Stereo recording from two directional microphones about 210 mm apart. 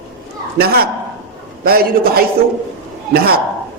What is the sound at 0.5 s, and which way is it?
A man's voice, 50° right (ahead or behind).